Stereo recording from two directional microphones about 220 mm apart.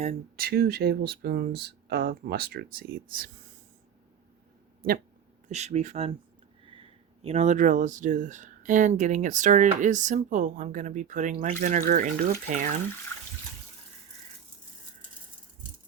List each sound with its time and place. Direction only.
0.3 s speech: 45° right (ahead or behind)
5.5 s speech: 30° right (ahead or behind)